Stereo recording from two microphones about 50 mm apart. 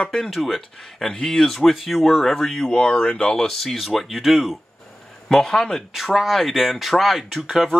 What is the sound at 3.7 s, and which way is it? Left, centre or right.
Speech, centre.